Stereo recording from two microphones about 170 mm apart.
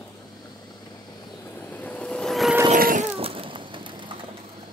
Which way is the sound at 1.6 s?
10° left (ahead or behind).